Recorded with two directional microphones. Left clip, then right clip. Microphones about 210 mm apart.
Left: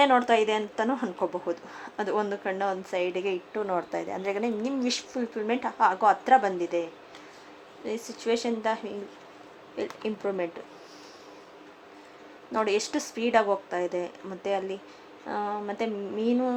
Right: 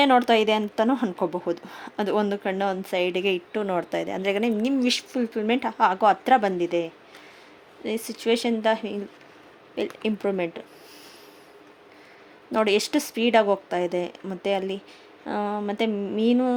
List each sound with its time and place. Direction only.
0.0 s a woman's voice: 50° right (ahead or behind)
7.9 s a woman's voice: 50° right (ahead or behind)
10.2 s speech: 55° right (ahead or behind)
12.5 s a woman's voice: 50° right (ahead or behind)